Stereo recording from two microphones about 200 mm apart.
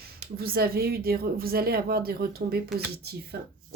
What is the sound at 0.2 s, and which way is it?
Speech, 50° right (ahead or behind).